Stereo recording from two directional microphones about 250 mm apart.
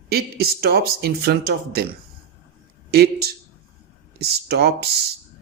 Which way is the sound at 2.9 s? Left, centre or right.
Right.